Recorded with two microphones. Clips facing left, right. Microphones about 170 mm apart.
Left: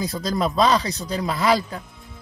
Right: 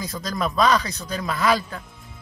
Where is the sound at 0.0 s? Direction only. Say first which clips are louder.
Left 4 dB; 30° left (ahead or behind).